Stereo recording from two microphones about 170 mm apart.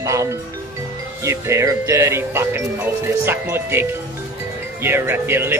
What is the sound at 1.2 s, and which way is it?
Music, 15° right (ahead or behind).